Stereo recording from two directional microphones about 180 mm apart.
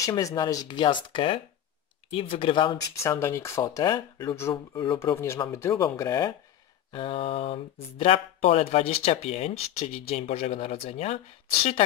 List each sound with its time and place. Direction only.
0.0 s speech: 20° left (ahead or behind)
3.0 s speech: 15° left (ahead or behind); by 11.1 s 35° left (ahead or behind)